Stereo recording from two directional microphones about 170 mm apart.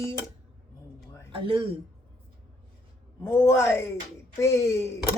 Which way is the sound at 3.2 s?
15° left (ahead or behind).